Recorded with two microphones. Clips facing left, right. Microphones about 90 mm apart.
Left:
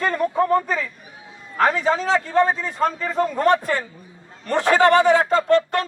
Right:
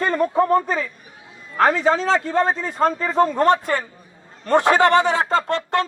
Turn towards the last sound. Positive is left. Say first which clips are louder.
# left 3 dB
turn(degrees=-25)  # may be behind; listen again after turning